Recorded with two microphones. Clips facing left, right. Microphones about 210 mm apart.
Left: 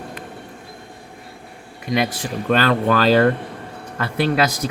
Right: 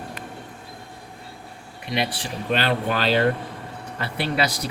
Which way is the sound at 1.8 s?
45° left (ahead or behind).